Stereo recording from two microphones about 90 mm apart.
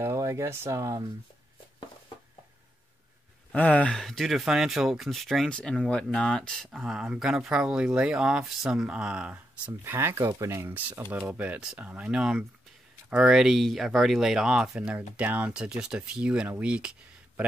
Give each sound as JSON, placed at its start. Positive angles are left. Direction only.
{"t": 0.0, "sound": "speech", "side_deg": -30}
{"t": 3.5, "sound": "speech", "side_deg": 15}
{"t": 4.0, "sound": "speech", "side_deg": 0}
{"t": 6.7, "sound": "speech", "side_deg": -5}
{"t": 9.7, "sound": "speech", "side_deg": -25}
{"t": 10.7, "sound": "speech", "side_deg": -20}
{"t": 11.6, "sound": "speech", "side_deg": -5}